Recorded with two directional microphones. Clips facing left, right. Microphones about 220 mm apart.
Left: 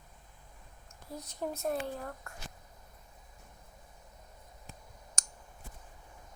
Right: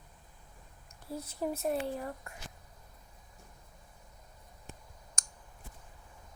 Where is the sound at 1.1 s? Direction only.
5° right (ahead or behind).